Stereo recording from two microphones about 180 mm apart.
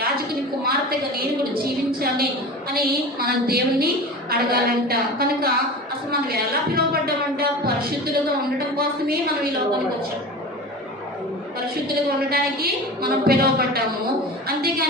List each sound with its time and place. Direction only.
0.0 s a woman's voice: 55° right (ahead or behind)
12.3 s a woman's voice: 55° right (ahead or behind)